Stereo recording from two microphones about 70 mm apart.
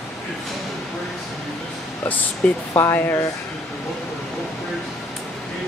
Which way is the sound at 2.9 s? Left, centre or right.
Left.